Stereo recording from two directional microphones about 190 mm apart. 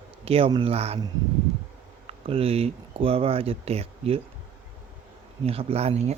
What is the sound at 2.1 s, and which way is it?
Speech, 30° right (ahead or behind).